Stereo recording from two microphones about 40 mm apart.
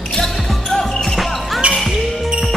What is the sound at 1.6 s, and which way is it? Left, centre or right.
Basketball bounce, right.